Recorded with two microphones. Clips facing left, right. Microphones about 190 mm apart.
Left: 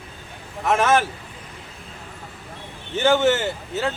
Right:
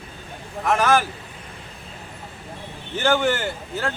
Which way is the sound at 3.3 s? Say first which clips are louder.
Left 3 dB; 5° left (ahead or behind).